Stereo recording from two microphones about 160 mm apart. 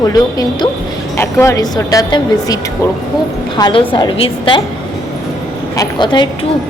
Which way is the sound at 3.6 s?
25° left (ahead or behind).